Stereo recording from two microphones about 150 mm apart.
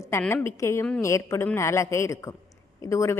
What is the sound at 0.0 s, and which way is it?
A woman's voice, 15° left (ahead or behind).